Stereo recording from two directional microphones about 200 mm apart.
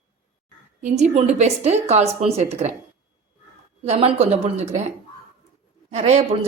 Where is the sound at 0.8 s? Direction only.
35° right (ahead or behind).